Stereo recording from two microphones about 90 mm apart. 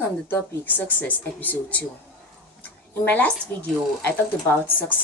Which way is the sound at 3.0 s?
15° left (ahead or behind).